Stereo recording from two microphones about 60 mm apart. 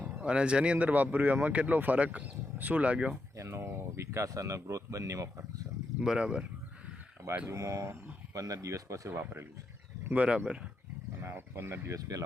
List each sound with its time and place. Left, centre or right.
0.1 s speech: centre
3.3 s speech: right
6.0 s speech: centre
7.5 s speech: right
8.3 s speech: right
9.1 s speech: right
10.2 s speech: centre
11.2 s speech: right
11.9 s speech: right